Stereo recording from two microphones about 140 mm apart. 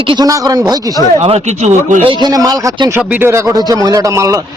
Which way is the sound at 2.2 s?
25° right (ahead or behind).